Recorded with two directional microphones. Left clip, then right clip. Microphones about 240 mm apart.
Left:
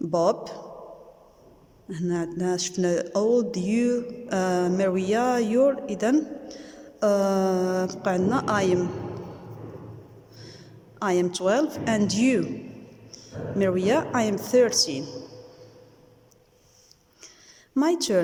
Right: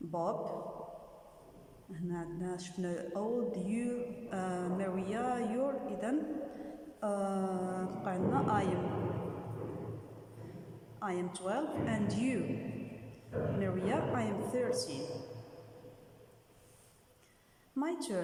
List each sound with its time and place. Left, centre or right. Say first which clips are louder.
0.1 s speech: left 13 dB; left
1.9 s speech: left 14 dB; left
11.0 s speech: left 14 dB; left
13.6 s speech: left 15 dB; left
17.7 s speech: left 14 dB; left